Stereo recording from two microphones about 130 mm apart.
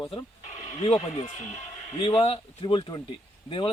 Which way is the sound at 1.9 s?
45° left (ahead or behind).